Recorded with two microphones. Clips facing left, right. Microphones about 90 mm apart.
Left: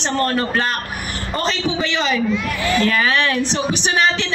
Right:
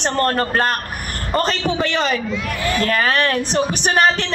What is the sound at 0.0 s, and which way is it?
A woman's voice, 45° right (ahead or behind).